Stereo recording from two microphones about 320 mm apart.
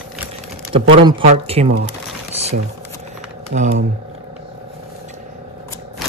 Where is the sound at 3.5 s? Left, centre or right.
Right.